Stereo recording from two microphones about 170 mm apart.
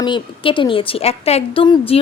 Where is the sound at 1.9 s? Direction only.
35° left (ahead or behind).